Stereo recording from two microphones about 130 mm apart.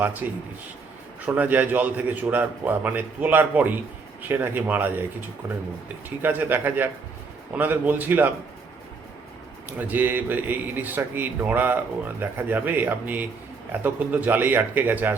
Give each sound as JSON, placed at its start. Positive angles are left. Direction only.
{"t": 0.0, "sound": "a man's voice", "side_deg": -15}
{"t": 5.4, "sound": "a man's voice", "side_deg": -25}
{"t": 9.6, "sound": "a man's voice", "side_deg": -15}